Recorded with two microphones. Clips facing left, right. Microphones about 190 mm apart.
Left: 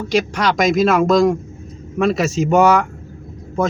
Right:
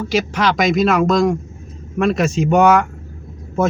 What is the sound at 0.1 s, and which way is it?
A man's voice, centre (ahead or behind).